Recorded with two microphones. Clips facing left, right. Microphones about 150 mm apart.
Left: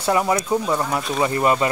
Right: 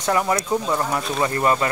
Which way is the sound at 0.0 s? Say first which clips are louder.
Left 1 dB; 15° left (ahead or behind).